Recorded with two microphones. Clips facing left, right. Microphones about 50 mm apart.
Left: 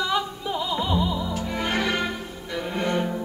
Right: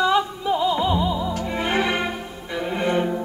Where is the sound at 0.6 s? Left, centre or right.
Right.